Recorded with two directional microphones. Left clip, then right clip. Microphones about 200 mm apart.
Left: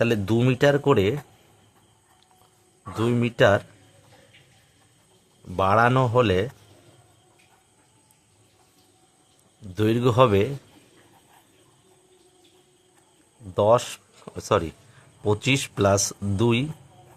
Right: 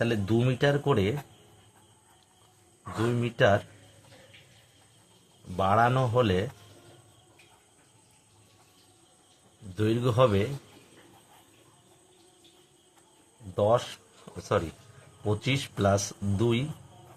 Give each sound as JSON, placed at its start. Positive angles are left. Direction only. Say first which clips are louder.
{"t": 0.0, "sound": "speech", "louder": "left 5 dB", "side_deg": 50}
{"t": 3.0, "sound": "speech", "louder": "left 5 dB", "side_deg": 50}
{"t": 5.5, "sound": "speech", "louder": "left 5 dB", "side_deg": 55}
{"t": 9.7, "sound": "speech", "louder": "left 6 dB", "side_deg": 50}
{"t": 13.6, "sound": "speech", "louder": "left 6 dB", "side_deg": 50}